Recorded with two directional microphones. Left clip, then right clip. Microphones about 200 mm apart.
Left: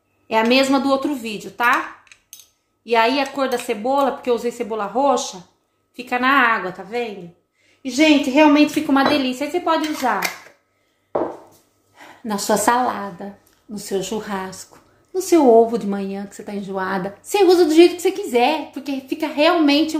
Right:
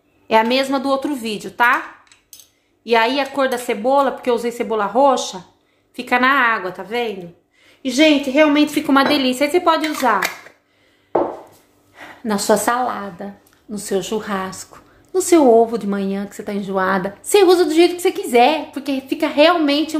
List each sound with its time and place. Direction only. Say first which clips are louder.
0.3 s a woman's voice: right 1 dB; 25° right (ahead or behind)
2.8 s a woman's voice: right 1 dB; 25° right (ahead or behind)
11.9 s a woman's voice: right 4 dB; 15° right (ahead or behind)